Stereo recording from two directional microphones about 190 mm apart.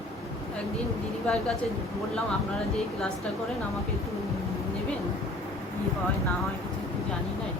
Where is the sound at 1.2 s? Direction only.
Centre (ahead or behind).